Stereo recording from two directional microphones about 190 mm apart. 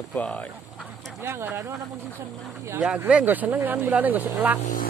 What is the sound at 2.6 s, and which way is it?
Speech, 10° right (ahead or behind).